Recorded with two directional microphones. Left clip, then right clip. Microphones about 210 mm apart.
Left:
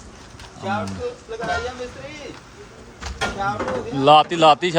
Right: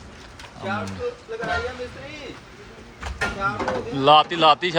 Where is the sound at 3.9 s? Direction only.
20° left (ahead or behind).